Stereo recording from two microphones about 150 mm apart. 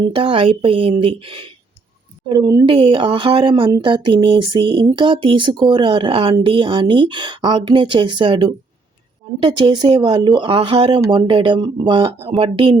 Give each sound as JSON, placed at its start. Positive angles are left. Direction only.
{"t": 0.0, "sound": "a woman's voice", "side_deg": -35}
{"t": 2.6, "sound": "speech", "side_deg": -35}